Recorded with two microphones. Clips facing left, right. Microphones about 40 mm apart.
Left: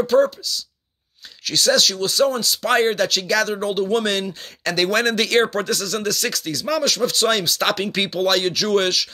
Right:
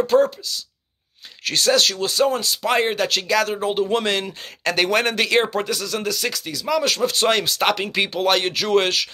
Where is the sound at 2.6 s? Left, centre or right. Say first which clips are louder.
Left 2 dB; centre; by 4.9 s right.